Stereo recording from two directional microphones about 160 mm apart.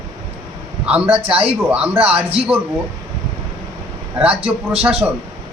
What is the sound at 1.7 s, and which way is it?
Speech, 10° right (ahead or behind).